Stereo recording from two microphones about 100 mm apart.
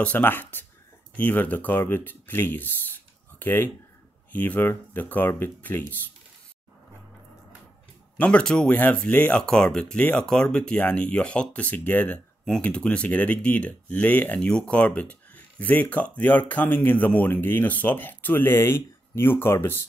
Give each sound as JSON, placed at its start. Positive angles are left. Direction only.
{"t": 0.0, "sound": "speech", "side_deg": 15}
{"t": 8.2, "sound": "speech", "side_deg": 10}